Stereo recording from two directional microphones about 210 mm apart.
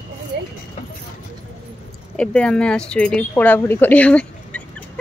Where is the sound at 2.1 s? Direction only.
5° left (ahead or behind).